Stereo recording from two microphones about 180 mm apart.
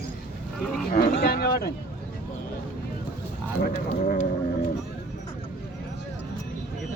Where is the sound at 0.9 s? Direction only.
60° left (ahead or behind).